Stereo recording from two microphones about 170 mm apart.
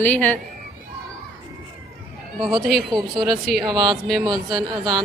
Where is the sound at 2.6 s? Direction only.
Centre (ahead or behind).